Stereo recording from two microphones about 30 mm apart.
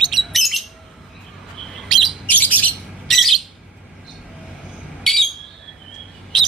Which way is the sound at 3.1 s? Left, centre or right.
Centre.